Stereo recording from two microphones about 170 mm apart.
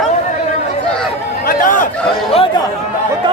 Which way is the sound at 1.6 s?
50° left (ahead or behind).